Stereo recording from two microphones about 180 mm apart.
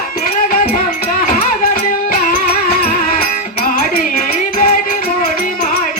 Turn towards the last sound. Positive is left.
turn(degrees=50)  # may be behind; listen again after turning